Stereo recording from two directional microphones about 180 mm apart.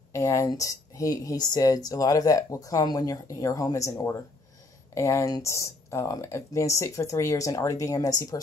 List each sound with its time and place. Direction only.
0.1 s speech: 15° left (ahead or behind)